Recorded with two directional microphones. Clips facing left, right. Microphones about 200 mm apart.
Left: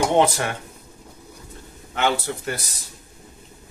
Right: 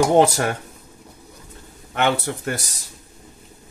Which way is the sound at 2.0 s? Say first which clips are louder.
Right 2 dB; 50° right (ahead or behind).